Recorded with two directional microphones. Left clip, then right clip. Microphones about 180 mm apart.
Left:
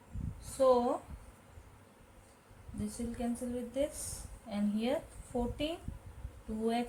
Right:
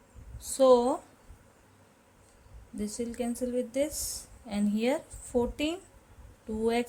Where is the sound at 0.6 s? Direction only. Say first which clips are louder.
Right 6 dB; 65° right (ahead or behind).